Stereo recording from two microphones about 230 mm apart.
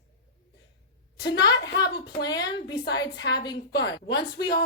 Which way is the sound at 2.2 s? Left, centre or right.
Centre.